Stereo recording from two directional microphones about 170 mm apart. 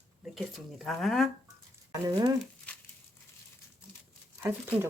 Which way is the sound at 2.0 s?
20° right (ahead or behind).